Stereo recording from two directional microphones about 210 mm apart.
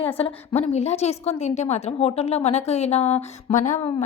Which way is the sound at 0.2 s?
30° left (ahead or behind).